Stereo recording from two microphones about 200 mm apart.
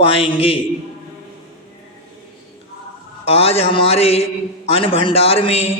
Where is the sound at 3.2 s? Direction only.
30° left (ahead or behind).